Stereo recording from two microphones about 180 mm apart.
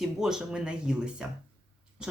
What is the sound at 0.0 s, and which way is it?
Speech, centre (ahead or behind).